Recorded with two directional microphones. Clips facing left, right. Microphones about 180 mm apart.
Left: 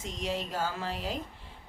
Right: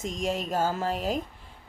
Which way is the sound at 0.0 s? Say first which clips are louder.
Right 5 dB; 45° right (ahead or behind).